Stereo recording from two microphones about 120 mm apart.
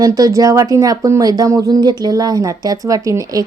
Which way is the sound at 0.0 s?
30° right (ahead or behind).